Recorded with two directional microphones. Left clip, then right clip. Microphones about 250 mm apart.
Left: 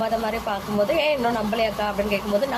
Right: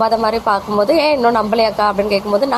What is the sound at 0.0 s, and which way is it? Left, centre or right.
A woman's voice, right.